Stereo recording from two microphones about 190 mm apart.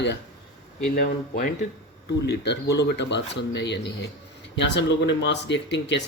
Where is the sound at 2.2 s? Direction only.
65° left (ahead or behind).